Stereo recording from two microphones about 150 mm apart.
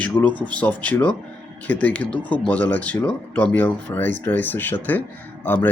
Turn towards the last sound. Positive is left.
turn(degrees=10)  # may be behind; listen again after turning